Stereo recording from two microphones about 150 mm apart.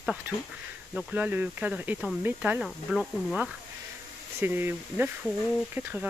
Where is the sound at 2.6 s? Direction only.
Centre (ahead or behind).